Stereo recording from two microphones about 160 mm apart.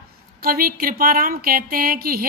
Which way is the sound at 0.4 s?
65° right (ahead or behind).